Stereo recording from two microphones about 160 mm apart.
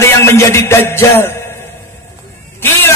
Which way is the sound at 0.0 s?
15° left (ahead or behind).